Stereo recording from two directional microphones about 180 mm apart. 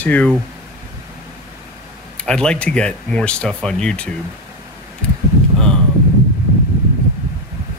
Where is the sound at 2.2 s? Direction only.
5° left (ahead or behind).